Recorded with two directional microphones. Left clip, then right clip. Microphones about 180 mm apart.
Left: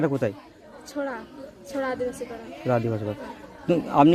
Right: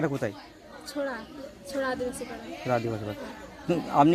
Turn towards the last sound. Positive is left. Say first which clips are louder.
# left 3 dB
turn(degrees=55)  # may be behind; listen again after turning